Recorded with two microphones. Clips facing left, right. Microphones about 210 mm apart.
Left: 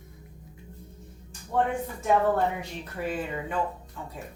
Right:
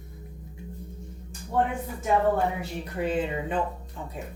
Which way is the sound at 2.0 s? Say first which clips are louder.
Even; 10° right (ahead or behind).